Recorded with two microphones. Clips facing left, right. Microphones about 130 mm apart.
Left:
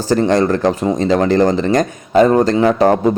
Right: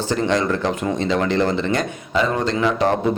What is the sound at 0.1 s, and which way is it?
Speech, 40° left (ahead or behind).